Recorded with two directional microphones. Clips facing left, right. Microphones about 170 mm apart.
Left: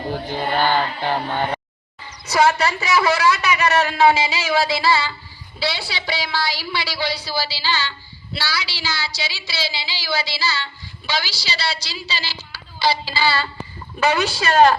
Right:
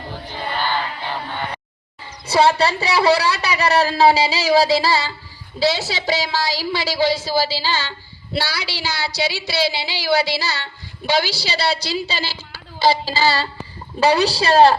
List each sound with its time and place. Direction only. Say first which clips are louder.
0.5 s music: left 4 dB; 50° left (ahead or behind)
2.2 s a woman's voice: right 2 dB; 30° right (ahead or behind)